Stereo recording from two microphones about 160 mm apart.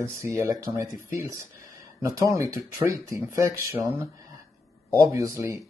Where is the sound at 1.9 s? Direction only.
20° right (ahead or behind).